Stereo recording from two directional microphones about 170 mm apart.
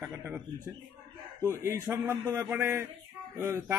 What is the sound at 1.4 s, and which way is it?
Speech, 20° right (ahead or behind).